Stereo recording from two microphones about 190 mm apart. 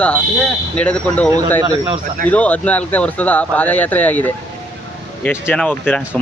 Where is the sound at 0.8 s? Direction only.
5° left (ahead or behind).